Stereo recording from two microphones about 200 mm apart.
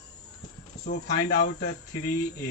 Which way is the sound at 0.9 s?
55° left (ahead or behind).